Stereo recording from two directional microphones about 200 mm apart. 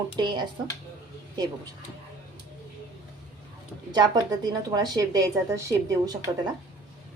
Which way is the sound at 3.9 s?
20° right (ahead or behind).